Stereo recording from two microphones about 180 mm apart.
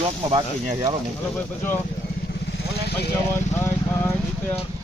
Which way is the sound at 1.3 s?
10° left (ahead or behind).